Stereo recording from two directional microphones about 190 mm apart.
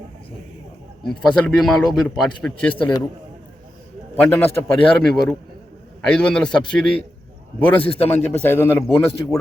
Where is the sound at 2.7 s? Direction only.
25° left (ahead or behind).